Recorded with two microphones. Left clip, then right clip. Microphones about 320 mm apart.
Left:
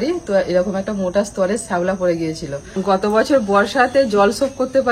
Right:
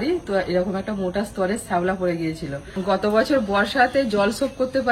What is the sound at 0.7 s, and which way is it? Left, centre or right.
Speech, left.